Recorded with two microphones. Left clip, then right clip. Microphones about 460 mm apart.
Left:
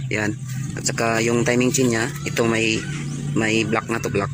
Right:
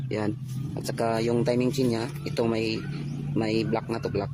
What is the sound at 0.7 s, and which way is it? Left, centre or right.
Speech, right.